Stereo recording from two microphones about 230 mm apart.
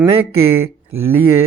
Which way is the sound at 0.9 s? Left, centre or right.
Right.